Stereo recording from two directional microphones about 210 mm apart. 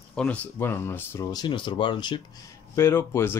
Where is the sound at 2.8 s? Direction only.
10° left (ahead or behind).